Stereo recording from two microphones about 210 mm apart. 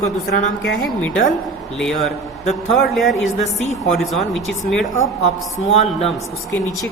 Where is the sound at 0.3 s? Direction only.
50° left (ahead or behind).